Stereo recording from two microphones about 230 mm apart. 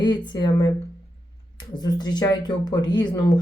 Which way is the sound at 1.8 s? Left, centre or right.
Centre.